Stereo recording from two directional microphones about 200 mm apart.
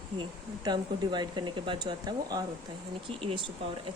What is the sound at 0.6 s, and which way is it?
Speech, 20° right (ahead or behind).